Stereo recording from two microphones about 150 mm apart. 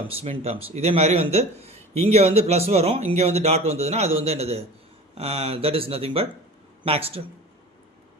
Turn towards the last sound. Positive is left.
turn(degrees=-40)  # may be behind; listen again after turning